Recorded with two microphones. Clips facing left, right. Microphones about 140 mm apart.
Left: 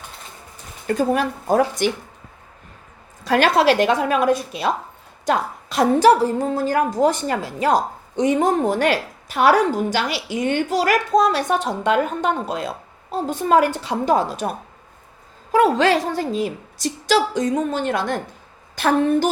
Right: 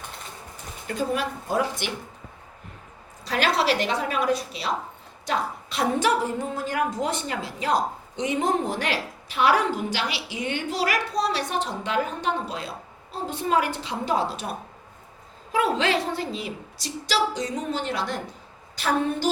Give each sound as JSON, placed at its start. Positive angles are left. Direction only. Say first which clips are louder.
{"t": 0.9, "sound": "a woman's voice", "louder": "left 7 dB", "side_deg": 45}
{"t": 3.2, "sound": "a woman's voice", "louder": "left 7 dB", "side_deg": 50}
{"t": 15.5, "sound": "a woman's voice", "louder": "left 7 dB", "side_deg": 40}